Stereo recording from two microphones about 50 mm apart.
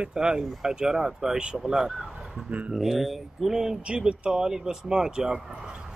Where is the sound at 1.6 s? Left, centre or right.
Centre.